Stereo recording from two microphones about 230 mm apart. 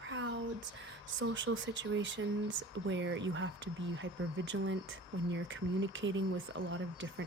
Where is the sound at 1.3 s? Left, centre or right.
Right.